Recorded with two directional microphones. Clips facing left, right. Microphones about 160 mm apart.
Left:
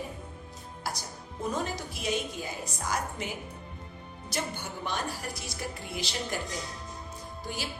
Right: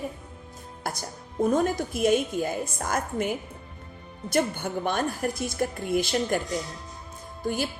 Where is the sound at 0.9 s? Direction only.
50° right (ahead or behind).